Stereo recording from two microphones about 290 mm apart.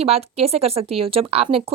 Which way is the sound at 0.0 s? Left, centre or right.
Right.